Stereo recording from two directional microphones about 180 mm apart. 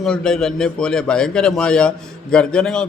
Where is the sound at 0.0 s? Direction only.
5° left (ahead or behind).